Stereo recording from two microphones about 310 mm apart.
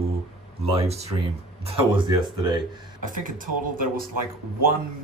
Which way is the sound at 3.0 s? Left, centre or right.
Right.